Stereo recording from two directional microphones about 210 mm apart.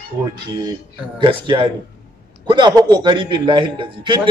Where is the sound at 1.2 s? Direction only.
25° right (ahead or behind).